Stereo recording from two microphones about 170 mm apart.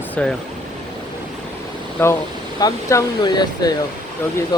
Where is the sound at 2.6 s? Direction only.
20° left (ahead or behind).